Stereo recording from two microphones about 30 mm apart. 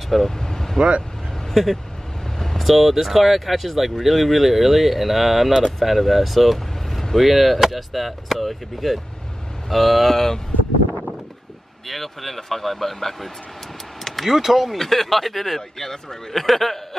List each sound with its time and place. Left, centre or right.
0.4 s vehicle: centre
1.5 s speech: centre
2.3 s vehicle: centre
2.6 s speech: centre
10.1 s speech: centre
11.9 s speech: centre
14.0 s vehicle: centre
14.3 s speech: centre
14.8 s speech: centre